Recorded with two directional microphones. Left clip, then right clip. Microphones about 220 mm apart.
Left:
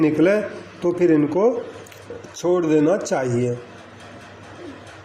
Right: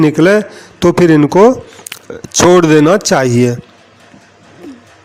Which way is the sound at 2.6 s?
40° right (ahead or behind).